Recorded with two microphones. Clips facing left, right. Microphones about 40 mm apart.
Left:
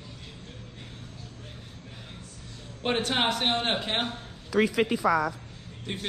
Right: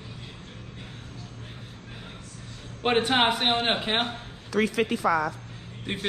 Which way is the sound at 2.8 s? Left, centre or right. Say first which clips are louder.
Right 4 dB; right.